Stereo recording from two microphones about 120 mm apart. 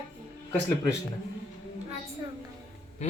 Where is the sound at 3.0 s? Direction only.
70° left (ahead or behind).